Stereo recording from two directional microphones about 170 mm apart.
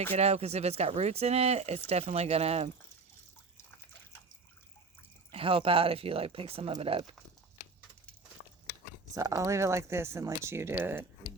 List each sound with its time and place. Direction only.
0.1 s speech: 40° right (ahead or behind)
5.3 s speech: 35° right (ahead or behind)
9.1 s speech: 20° right (ahead or behind)